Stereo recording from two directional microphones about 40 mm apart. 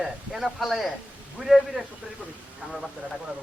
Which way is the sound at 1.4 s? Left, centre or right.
Centre.